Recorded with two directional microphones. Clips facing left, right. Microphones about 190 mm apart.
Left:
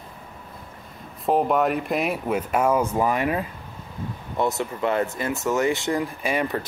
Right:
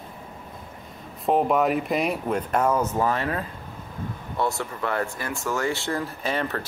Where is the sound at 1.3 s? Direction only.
Centre (ahead or behind).